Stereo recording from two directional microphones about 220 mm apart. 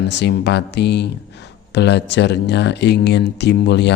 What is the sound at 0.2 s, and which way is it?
Speech, 50° left (ahead or behind).